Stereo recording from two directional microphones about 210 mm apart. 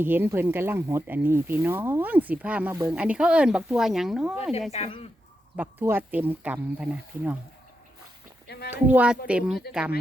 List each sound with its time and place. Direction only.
0.0 s speech: 10° right (ahead or behind)
4.7 s speech: 30° left (ahead or behind)
5.5 s speech: 10° right (ahead or behind)
8.4 s a sound: 45° left (ahead or behind)
8.7 s speech: 10° right (ahead or behind)